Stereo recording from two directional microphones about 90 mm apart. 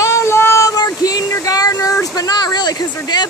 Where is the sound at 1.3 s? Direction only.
40° left (ahead or behind).